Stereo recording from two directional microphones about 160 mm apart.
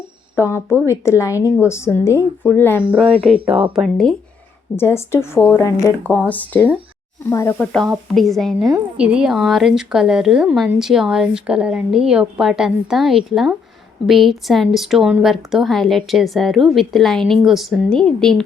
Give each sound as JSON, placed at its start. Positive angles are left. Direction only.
{"t": 0.3, "sound": "a woman's voice", "side_deg": 15}
{"t": 3.2, "sound": "speech", "side_deg": -35}
{"t": 3.8, "sound": "speech", "side_deg": 0}
{"t": 4.8, "sound": "a woman's voice", "side_deg": 15}
{"t": 7.6, "sound": "speech", "side_deg": 5}